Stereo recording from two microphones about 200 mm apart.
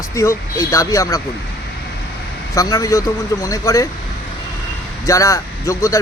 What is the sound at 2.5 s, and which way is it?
Speech, 15° left (ahead or behind).